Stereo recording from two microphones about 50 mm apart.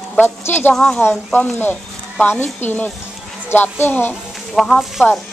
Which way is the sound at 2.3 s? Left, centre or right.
Left.